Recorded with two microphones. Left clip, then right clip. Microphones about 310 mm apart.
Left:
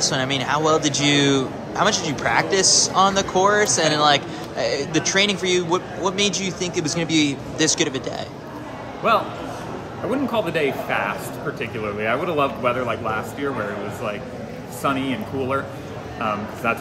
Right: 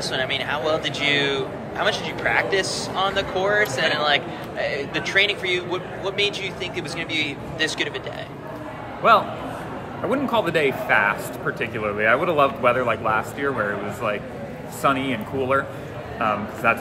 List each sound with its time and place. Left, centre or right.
0.0 s a man's voice: left
10.0 s speech: centre
14.8 s speech: centre